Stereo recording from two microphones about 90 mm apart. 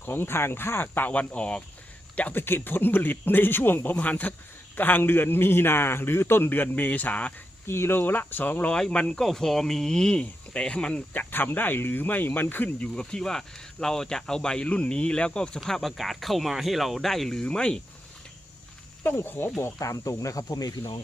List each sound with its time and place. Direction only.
0.0 s a man's voice: 25° left (ahead or behind)
7.7 s a man's voice: 25° left (ahead or behind); by 17.7 s 10° left (ahead or behind)
19.0 s a man's voice: 20° left (ahead or behind)
19.6 s speech: 35° left (ahead or behind); by 21.0 s 50° left (ahead or behind)